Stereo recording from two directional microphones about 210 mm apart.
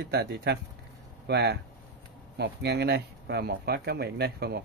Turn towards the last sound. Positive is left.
turn(degrees=-50)  # may be behind; listen again after turning